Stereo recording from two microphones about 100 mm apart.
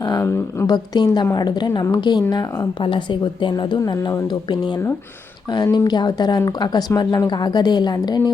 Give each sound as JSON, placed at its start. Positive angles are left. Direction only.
{"t": 0.2, "sound": "speech", "side_deg": 25}
{"t": 0.7, "sound": "a woman's voice", "side_deg": 45}
{"t": 2.8, "sound": "a woman's voice", "side_deg": 55}